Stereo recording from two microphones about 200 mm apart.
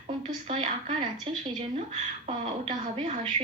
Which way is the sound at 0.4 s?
25° right (ahead or behind).